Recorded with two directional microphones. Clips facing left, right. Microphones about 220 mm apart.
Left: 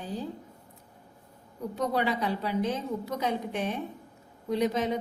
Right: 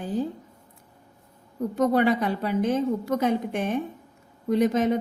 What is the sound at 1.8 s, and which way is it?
A woman's voice, 50° right (ahead or behind).